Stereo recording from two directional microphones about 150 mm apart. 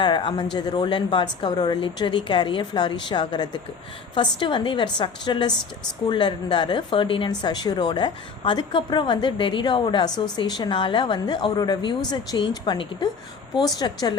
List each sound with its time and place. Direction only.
0.0 s a woman's voice: 35° left (ahead or behind)